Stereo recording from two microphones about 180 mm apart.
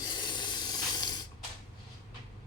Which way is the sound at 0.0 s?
25° left (ahead or behind).